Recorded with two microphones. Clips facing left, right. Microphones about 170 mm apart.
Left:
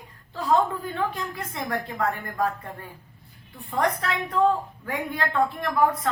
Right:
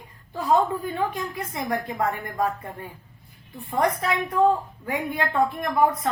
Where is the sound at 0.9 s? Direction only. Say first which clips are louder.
Right 1 dB; 15° right (ahead or behind).